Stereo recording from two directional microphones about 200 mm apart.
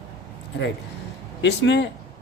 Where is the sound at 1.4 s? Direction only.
60° left (ahead or behind).